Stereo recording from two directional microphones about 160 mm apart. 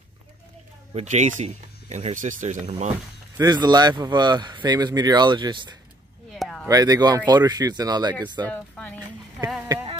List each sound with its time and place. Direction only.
0.9 s speech: 45° right (ahead or behind)
3.3 s speech: 25° right (ahead or behind)
6.3 s a sound: centre (ahead or behind)
6.7 s speech: 25° right (ahead or behind)
8.5 s speech: 10° left (ahead or behind)